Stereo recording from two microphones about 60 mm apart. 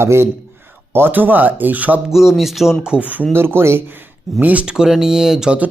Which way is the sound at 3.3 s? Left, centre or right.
Right.